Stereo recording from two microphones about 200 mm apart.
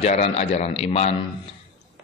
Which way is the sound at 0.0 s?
35° left (ahead or behind).